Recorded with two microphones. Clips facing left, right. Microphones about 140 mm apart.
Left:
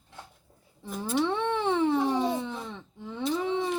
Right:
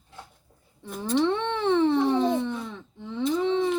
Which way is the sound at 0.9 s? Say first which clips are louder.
Right 4 dB; 5° left (ahead or behind).